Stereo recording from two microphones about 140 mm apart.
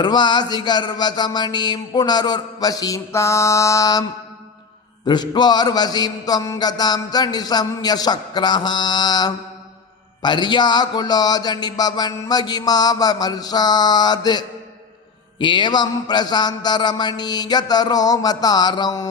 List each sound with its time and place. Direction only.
0.0 s a man's voice: 30° left (ahead or behind)
5.0 s a man's voice: 30° left (ahead or behind)